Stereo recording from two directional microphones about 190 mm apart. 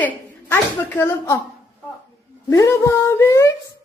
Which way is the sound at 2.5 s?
15° left (ahead or behind).